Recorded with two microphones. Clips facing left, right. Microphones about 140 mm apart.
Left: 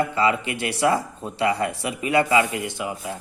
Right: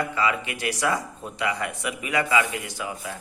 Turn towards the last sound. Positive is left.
turn(degrees=25)  # may be behind; listen again after turning